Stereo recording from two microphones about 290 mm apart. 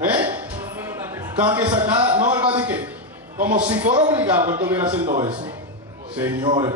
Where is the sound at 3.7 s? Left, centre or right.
Centre.